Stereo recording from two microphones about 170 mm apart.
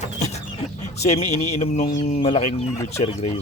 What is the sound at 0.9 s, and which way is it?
Speech, 40° left (ahead or behind).